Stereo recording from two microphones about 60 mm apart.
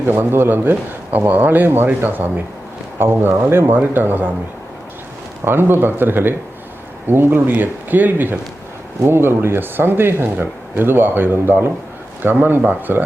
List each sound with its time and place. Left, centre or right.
0.0 s speech: right
5.5 s speech: right
9.0 s speech: right